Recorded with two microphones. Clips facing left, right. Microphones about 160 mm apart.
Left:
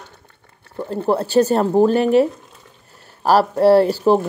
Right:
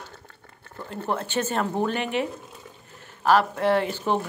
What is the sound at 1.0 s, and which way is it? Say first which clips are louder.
Speech: left 11 dB; 35° left (ahead or behind).